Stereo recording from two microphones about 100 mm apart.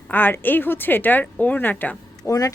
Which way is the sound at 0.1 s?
20° left (ahead or behind).